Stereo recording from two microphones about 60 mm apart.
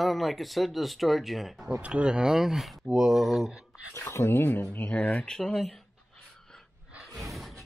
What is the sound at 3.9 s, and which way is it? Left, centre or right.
Speech, left.